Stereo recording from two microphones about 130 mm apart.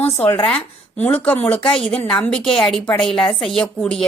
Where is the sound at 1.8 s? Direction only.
45° left (ahead or behind).